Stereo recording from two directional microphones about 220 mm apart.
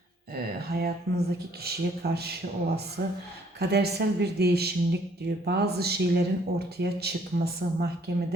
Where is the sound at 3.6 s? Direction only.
50° right (ahead or behind).